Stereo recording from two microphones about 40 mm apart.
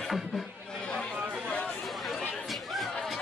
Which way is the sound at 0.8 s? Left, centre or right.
Left.